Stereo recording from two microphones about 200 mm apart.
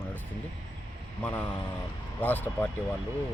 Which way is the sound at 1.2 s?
5° left (ahead or behind).